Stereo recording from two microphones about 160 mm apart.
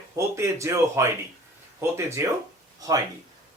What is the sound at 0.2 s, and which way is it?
Speech, 20° right (ahead or behind).